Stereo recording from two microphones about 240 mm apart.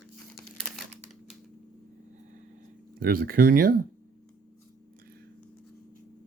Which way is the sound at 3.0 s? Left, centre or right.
Right.